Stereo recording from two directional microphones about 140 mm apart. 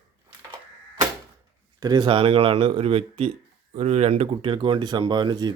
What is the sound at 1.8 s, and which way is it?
Speech, 30° right (ahead or behind).